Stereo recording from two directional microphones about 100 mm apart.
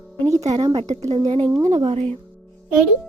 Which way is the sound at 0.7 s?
65° right (ahead or behind).